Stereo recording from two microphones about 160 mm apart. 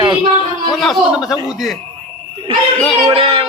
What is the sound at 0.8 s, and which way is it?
Speech, centre (ahead or behind).